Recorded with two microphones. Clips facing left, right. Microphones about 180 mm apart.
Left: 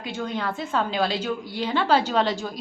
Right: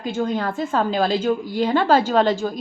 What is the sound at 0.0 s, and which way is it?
A woman's voice, 45° right (ahead or behind).